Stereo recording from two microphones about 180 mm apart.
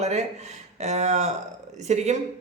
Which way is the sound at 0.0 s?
40° right (ahead or behind).